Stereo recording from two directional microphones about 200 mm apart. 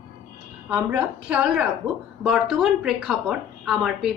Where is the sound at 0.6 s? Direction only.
5° right (ahead or behind).